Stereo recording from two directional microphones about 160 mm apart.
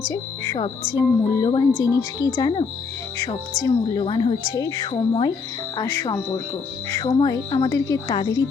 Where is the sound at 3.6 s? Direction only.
25° left (ahead or behind).